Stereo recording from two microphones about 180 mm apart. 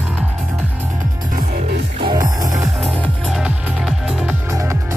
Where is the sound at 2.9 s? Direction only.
5° left (ahead or behind).